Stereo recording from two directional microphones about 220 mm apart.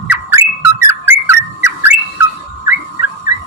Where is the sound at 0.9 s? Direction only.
10° right (ahead or behind).